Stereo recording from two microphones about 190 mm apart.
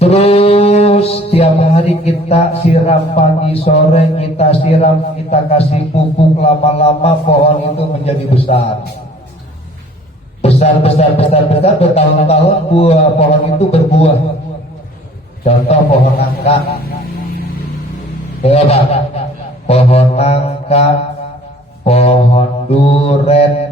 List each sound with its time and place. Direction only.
0.0 s mantra: 30° left (ahead or behind)
5.3 s speech: 35° left (ahead or behind)
10.4 s speech: 35° left (ahead or behind)
15.4 s speech: 35° left (ahead or behind)
18.4 s speech: 35° left (ahead or behind)
21.8 s speech: 30° left (ahead or behind)